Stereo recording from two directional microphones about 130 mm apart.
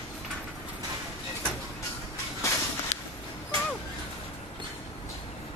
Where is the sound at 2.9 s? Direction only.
60° left (ahead or behind).